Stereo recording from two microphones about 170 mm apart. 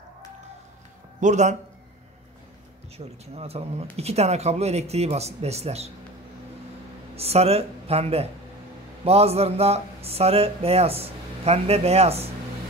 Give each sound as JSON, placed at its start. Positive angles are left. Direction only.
{"t": 1.2, "sound": "a man's voice", "side_deg": -45}
{"t": 3.0, "sound": "speech", "side_deg": -35}
{"t": 7.2, "sound": "speech", "side_deg": -35}